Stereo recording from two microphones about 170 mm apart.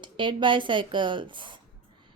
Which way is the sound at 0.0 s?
30° right (ahead or behind).